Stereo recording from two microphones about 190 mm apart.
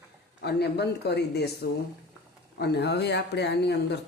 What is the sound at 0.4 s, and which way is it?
Speech, 60° left (ahead or behind).